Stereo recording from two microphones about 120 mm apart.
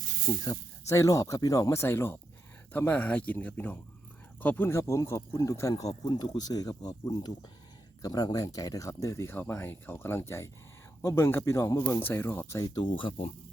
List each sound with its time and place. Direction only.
0.4 s speech: 30° left (ahead or behind)
12.6 s speech: 35° left (ahead or behind)